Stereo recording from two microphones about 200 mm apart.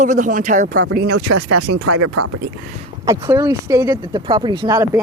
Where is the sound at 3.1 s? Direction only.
15° right (ahead or behind).